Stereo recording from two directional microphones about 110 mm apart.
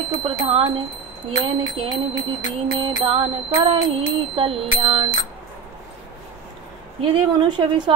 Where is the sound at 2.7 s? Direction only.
55° right (ahead or behind).